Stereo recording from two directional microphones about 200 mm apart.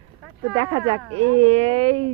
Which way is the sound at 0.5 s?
30° right (ahead or behind).